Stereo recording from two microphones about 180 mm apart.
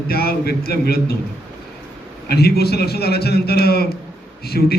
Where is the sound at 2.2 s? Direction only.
60° left (ahead or behind).